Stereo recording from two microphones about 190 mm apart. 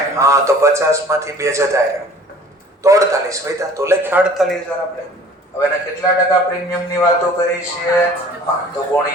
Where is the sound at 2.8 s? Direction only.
15° right (ahead or behind).